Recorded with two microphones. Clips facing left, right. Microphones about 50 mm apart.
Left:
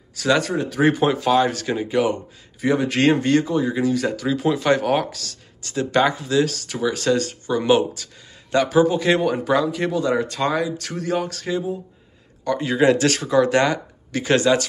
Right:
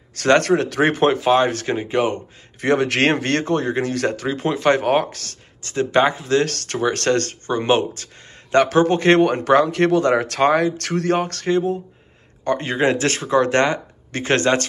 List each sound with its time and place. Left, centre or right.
0.1 s speech: right
0.8 s speech: right
1.2 s speech: right
2.6 s speech: right
4.3 s speech: right
6.3 s speech: right
12.4 s speech: right